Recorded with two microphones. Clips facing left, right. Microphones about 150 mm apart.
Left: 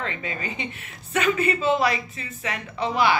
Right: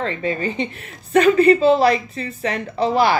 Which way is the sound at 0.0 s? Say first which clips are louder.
Right 9 dB; 35° right (ahead or behind).